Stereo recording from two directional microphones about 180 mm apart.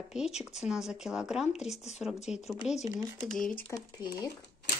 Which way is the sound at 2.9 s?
20° right (ahead or behind).